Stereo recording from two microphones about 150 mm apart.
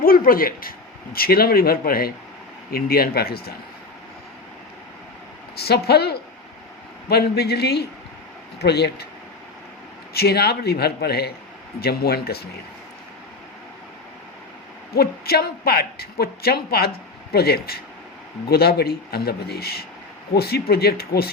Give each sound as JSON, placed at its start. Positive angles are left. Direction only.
{"t": 0.0, "sound": "speech", "side_deg": 75}
{"t": 1.1, "sound": "a woman's voice", "side_deg": 85}
{"t": 5.5, "sound": "a woman's voice", "side_deg": 90}
{"t": 10.2, "sound": "a woman's voice", "side_deg": 90}
{"t": 14.9, "sound": "a woman's voice", "side_deg": 90}